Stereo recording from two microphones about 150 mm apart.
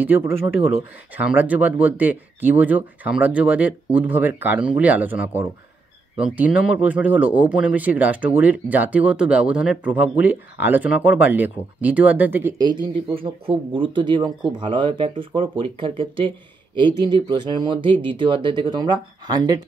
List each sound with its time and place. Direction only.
1.1 s speech: 10° right (ahead or behind)
12.5 s speech: 30° right (ahead or behind)